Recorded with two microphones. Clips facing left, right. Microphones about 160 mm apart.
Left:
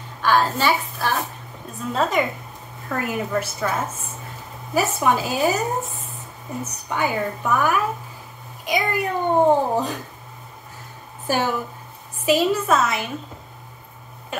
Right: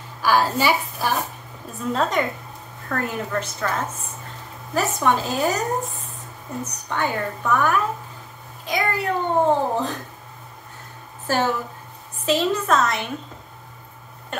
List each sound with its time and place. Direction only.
0.2 s a woman's voice: 5° right (ahead or behind)
1.8 s a woman's voice: centre (ahead or behind)
11.3 s a child's voice: 15° left (ahead or behind)
14.3 s speech: 5° left (ahead or behind)